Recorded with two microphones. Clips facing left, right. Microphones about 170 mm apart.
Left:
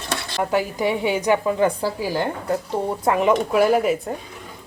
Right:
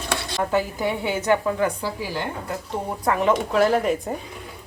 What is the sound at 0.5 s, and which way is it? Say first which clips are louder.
A woman's voice: left 3 dB; 15° left (ahead or behind).